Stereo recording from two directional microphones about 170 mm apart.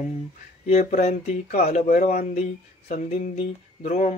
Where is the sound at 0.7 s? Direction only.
40° left (ahead or behind).